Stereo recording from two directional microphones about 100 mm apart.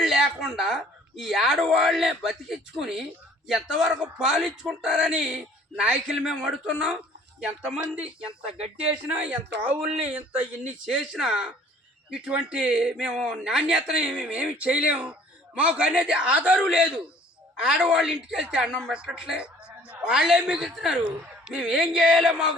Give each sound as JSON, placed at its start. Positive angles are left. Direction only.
{"t": 0.0, "sound": "a woman's voice", "side_deg": -5}
{"t": 8.5, "sound": "speech", "side_deg": -90}
{"t": 8.9, "sound": "a woman's voice", "side_deg": -10}